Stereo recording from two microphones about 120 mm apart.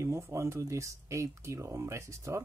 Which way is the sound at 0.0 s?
25° right (ahead or behind).